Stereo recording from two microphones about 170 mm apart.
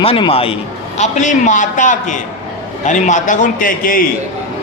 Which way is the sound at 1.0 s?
45° left (ahead or behind).